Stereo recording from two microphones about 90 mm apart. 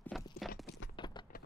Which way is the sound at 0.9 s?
60° left (ahead or behind).